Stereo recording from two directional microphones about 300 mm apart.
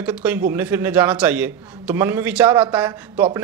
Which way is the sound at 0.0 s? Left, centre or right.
Centre.